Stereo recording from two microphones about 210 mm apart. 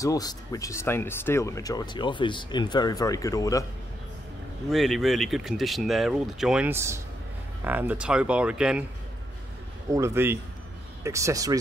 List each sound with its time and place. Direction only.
0.0 s speech: 15° left (ahead or behind)
4.6 s speech: centre (ahead or behind)
9.8 s a man's voice: 15° right (ahead or behind)